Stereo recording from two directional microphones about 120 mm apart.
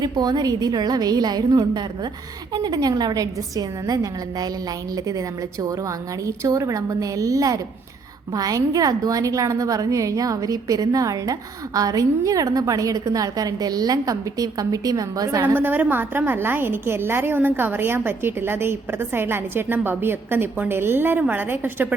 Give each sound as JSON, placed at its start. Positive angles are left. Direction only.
{"t": 0.0, "sound": "a woman's voice", "side_deg": -35}
{"t": 15.5, "sound": "a woman's voice", "side_deg": -15}